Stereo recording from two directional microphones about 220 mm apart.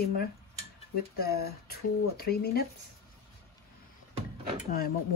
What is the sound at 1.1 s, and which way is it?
A woman's voice, 45° left (ahead or behind).